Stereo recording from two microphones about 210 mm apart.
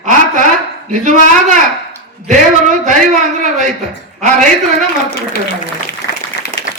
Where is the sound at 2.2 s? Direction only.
35° right (ahead or behind).